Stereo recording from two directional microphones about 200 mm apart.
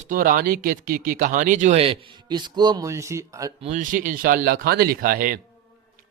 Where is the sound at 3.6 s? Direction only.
40° right (ahead or behind).